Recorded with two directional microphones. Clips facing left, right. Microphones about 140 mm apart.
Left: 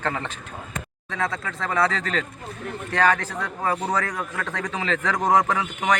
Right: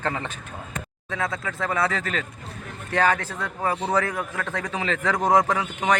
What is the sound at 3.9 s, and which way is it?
A man's voice, 10° right (ahead or behind).